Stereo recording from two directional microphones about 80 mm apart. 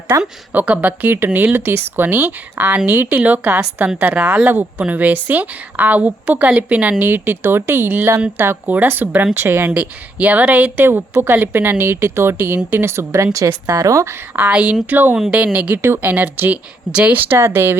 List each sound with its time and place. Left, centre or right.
0.1 s a woman's voice: right
0.5 s a woman's voice: centre; by 14.2 s right
14.3 s a woman's voice: centre
17.2 s speech: right